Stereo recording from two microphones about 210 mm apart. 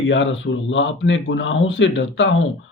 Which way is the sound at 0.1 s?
60° left (ahead or behind).